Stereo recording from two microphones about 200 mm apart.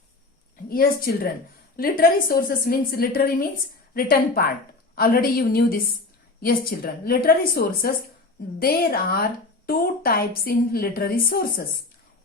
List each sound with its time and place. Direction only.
0.7 s a woman's voice: 45° left (ahead or behind)